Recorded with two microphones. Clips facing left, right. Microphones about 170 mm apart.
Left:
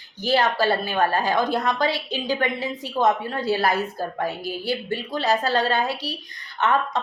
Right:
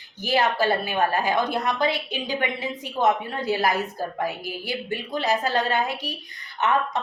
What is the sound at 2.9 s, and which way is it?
A woman's voice, 20° right (ahead or behind).